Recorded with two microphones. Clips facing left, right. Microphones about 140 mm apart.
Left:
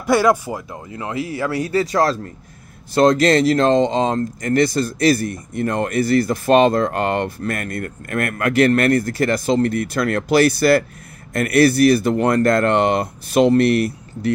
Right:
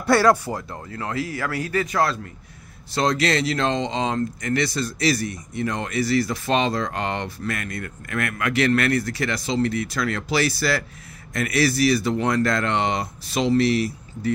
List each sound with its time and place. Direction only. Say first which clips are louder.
0.0 s speech: left 2 dB; 15° left (ahead or behind); by 2.1 s 35° left (ahead or behind)
2.9 s speech: left 8 dB; 50° left (ahead or behind)